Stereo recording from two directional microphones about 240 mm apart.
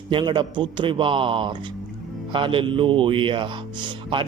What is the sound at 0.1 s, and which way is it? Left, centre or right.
A man's voice, centre.